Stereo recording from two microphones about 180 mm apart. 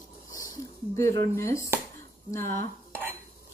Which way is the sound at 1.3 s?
15° left (ahead or behind).